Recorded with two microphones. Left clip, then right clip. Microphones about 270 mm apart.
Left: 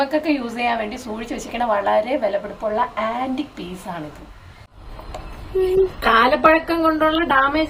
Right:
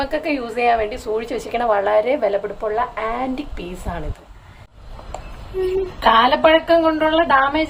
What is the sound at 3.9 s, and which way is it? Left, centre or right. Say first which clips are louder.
Speech: right 1 dB; centre.